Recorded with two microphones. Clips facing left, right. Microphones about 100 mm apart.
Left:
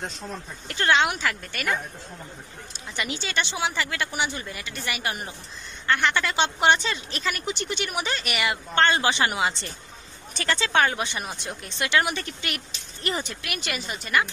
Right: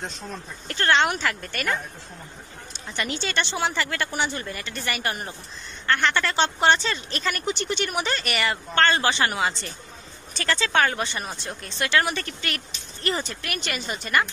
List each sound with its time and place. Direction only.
0.0 s speech: 5° left (ahead or behind)
3.0 s a woman's voice: 5° left (ahead or behind)